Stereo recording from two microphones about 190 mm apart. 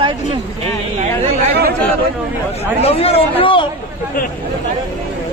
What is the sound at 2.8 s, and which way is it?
Speech, 30° left (ahead or behind).